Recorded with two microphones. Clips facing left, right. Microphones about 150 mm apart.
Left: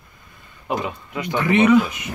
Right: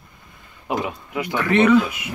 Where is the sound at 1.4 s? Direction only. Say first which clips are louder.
Left 1 dB; 15° left (ahead or behind).